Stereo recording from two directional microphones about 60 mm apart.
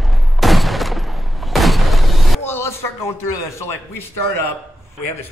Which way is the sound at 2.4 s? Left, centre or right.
Left.